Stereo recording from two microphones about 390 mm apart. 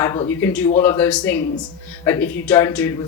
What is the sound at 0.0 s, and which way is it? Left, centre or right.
Speech, centre.